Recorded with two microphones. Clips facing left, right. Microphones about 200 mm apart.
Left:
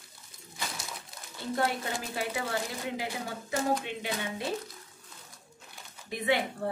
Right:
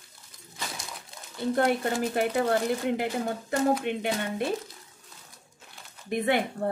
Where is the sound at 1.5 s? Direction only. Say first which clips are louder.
Right 5 dB; 50° right (ahead or behind).